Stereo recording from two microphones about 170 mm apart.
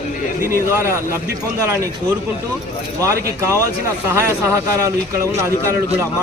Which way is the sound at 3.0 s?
20° right (ahead or behind).